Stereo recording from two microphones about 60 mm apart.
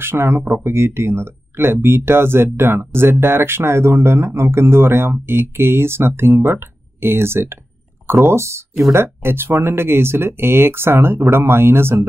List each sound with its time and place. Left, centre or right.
0.0 s speech: right